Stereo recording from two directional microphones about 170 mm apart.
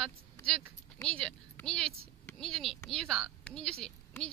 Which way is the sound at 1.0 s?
5° left (ahead or behind).